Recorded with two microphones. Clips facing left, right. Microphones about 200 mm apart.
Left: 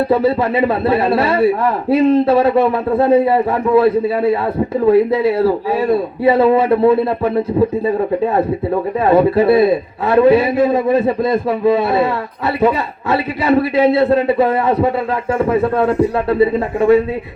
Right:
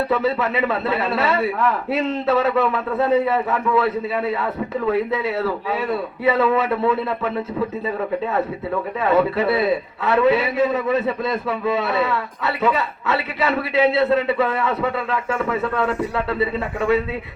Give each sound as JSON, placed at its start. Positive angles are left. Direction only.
{"t": 0.1, "sound": "a man's voice", "side_deg": 35}
{"t": 13.6, "sound": "a man's voice", "side_deg": 35}